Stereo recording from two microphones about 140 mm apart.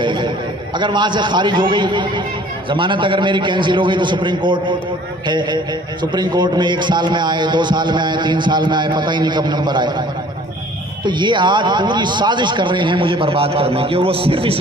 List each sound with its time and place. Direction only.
0.0 s a sound: 35° right (ahead or behind)
0.8 s a man's voice: 35° right (ahead or behind)
11.0 s a man's voice: 35° right (ahead or behind)